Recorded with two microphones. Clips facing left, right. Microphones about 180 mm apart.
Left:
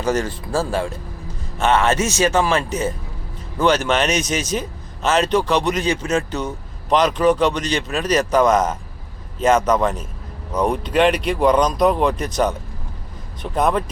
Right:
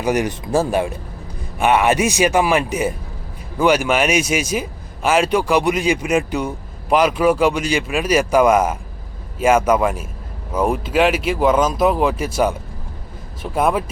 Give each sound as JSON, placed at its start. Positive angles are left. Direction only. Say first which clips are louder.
{"t": 0.0, "sound": "a man's voice", "louder": "right 2 dB", "side_deg": -15}